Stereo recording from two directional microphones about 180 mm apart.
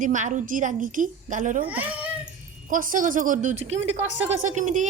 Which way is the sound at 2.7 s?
50° right (ahead or behind).